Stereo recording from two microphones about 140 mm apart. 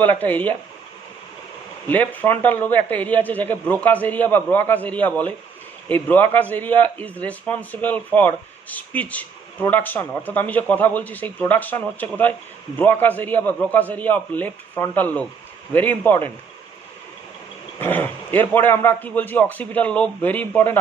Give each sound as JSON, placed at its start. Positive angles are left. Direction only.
{"t": 0.0, "sound": "a man's voice", "side_deg": 10}
{"t": 1.9, "sound": "a man's voice", "side_deg": 10}
{"t": 17.7, "sound": "a man's voice", "side_deg": 15}